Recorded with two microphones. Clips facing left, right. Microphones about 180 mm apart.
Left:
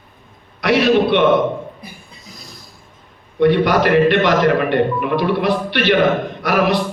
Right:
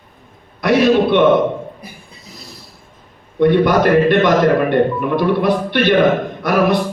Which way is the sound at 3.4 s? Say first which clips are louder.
Right 1 dB; 50° right (ahead or behind).